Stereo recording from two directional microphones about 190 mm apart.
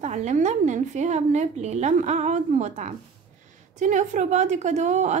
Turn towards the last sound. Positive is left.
turn(degrees=-40)  # may be behind; listen again after turning